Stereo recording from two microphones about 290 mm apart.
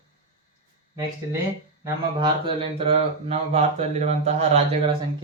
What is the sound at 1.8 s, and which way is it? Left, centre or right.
Speech, centre.